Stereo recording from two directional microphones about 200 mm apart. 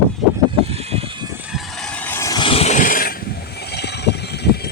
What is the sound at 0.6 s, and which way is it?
Vehicle, 30° right (ahead or behind).